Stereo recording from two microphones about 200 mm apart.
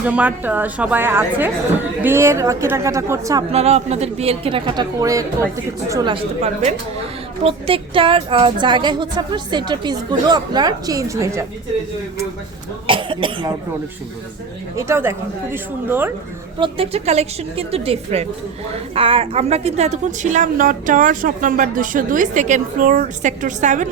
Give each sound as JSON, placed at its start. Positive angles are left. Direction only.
{"t": 0.0, "sound": "a woman's voice", "side_deg": -5}
{"t": 3.5, "sound": "speech", "side_deg": -30}
{"t": 6.4, "sound": "a woman's voice", "side_deg": -35}
{"t": 12.9, "sound": "cough", "side_deg": -25}
{"t": 14.8, "sound": "a woman's voice", "side_deg": -15}
{"t": 16.6, "sound": "a woman's voice", "side_deg": -25}